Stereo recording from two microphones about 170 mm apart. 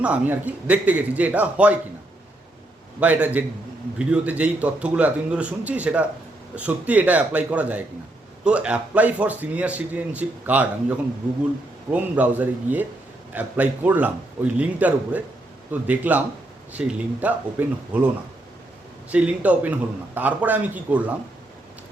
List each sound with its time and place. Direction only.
0.0 s speech: 10° right (ahead or behind)
3.0 s speech: 10° right (ahead or behind)
19.1 s speech: 10° right (ahead or behind)